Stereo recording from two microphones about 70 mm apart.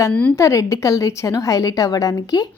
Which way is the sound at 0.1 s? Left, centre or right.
Centre.